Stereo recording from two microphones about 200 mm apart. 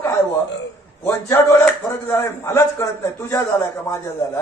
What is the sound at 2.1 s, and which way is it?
A man's voice, 10° left (ahead or behind).